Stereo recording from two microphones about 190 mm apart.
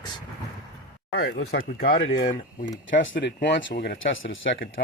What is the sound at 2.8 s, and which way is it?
Speech, 80° left.